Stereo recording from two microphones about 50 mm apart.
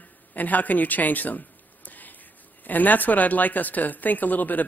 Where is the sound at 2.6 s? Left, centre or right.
Left.